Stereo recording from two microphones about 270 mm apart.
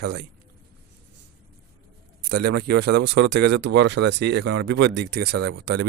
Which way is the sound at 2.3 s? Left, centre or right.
Right.